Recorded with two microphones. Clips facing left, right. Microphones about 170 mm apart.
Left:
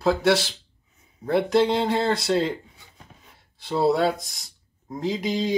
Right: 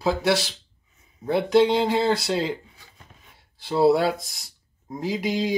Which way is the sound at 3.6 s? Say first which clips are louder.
Right 2 dB; centre (ahead or behind).